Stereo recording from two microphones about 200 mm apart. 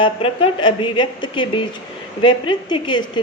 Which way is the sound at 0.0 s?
25° left (ahead or behind).